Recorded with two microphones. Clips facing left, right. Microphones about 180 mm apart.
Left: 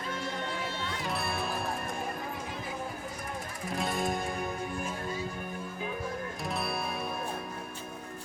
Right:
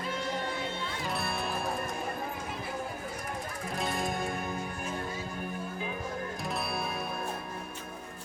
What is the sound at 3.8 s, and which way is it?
Music, centre (ahead or behind).